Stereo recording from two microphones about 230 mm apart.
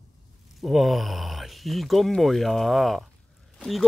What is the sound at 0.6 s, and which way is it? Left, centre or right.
Speech, centre.